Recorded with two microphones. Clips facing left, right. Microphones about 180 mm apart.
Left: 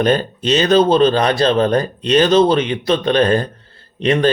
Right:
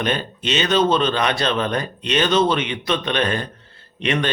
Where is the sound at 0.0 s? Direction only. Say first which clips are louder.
Left 8 dB; 40° left (ahead or behind).